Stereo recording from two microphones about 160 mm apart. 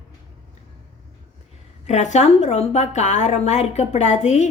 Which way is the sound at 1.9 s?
45° left (ahead or behind).